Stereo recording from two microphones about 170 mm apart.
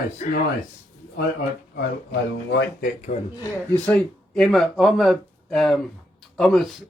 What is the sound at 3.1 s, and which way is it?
Speech, 45° left (ahead or behind).